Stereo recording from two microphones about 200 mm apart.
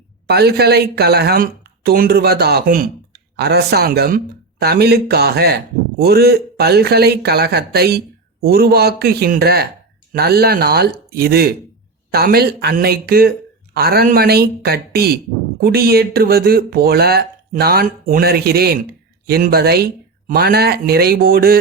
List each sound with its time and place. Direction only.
0.3 s a man's voice: 50° right (ahead or behind)